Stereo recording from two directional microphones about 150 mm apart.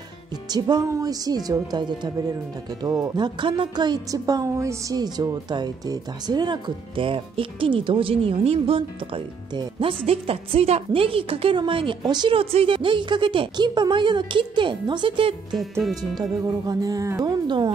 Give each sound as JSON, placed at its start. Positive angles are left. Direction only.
{"t": 0.5, "sound": "speech", "side_deg": -25}